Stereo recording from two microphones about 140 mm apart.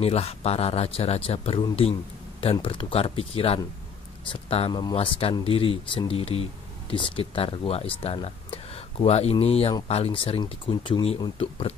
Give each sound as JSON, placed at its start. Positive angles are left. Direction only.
{"t": 0.0, "sound": "speech", "side_deg": 45}